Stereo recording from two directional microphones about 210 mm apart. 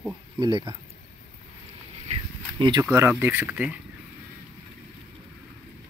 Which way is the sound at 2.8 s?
10° right (ahead or behind).